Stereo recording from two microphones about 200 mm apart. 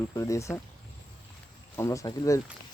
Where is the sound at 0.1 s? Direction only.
15° left (ahead or behind).